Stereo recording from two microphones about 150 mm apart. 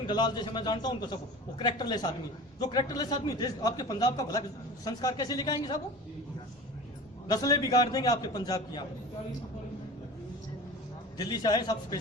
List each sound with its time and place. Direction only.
0.1 s a man's voice: 30° left (ahead or behind)
7.3 s a man's voice: 25° left (ahead or behind)
11.2 s a man's voice: 25° left (ahead or behind)